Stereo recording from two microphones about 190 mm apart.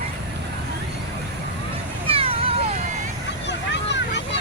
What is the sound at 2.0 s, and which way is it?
Vehicle, 30° right (ahead or behind).